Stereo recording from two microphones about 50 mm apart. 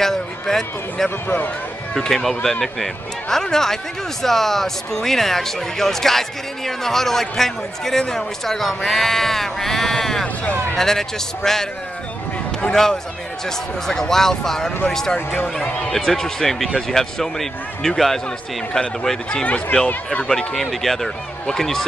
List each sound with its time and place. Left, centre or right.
0.0 s a man's voice: centre
10.2 s speech: left
10.8 s speech: centre
12.7 s speech: centre
19.4 s speech: left; by 21.8 s centre